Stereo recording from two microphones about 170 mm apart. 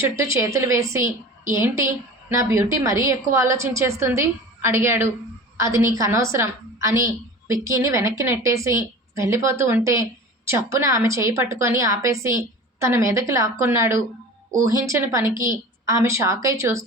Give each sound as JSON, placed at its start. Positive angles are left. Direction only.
{"t": 0.0, "sound": "a woman's voice", "side_deg": -15}